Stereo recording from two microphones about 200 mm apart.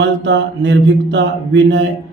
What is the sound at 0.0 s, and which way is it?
A man's voice, 65° right (ahead or behind).